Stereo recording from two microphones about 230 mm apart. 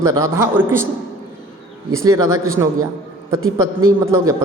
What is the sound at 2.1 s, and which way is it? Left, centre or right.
Speech, centre.